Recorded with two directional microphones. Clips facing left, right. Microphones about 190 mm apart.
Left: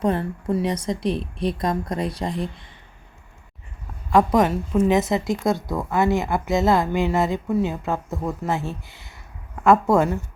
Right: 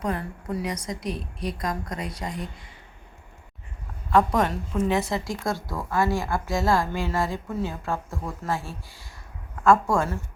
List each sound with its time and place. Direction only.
0.0 s a woman's voice: 25° left (ahead or behind)
4.1 s a woman's voice: 10° left (ahead or behind)